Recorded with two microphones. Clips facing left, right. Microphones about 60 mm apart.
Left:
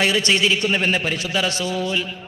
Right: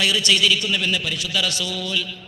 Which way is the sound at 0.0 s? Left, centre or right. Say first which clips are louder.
Left 2 dB; left.